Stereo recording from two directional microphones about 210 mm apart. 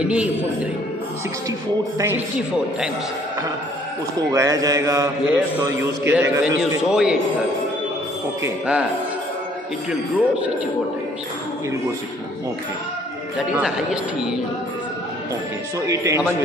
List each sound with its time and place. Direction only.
0.0 s a man's voice: 5° right (ahead or behind)
2.0 s a man's voice: 10° right (ahead or behind)
4.3 s a man's voice: 15° right (ahead or behind)
8.4 s a man's voice: 10° right (ahead or behind)
9.8 s a man's voice: 5° right (ahead or behind)
13.5 s speech: 5° right (ahead or behind)
15.9 s a man's voice: 15° right (ahead or behind)